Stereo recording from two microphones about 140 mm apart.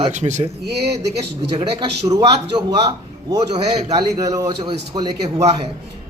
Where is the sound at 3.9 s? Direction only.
25° right (ahead or behind).